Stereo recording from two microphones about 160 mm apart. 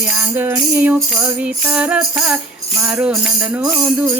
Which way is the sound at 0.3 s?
15° right (ahead or behind).